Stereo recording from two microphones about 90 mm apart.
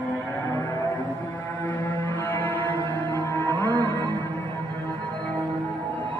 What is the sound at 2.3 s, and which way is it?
Music, 20° left (ahead or behind).